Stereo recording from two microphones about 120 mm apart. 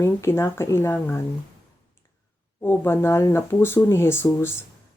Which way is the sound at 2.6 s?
20° left (ahead or behind).